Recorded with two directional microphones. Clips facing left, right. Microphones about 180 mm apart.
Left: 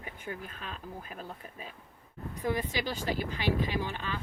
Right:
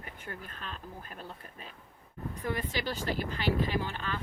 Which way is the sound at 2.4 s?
10° left (ahead or behind).